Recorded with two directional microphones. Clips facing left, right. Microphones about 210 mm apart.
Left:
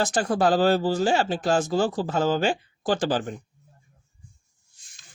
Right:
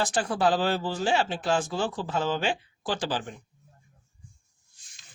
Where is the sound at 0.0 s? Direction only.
45° left (ahead or behind).